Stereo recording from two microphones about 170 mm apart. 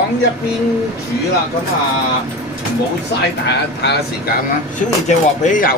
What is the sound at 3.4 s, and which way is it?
Speech, 75° left (ahead or behind).